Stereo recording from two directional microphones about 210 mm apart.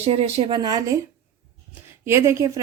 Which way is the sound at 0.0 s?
30° right (ahead or behind).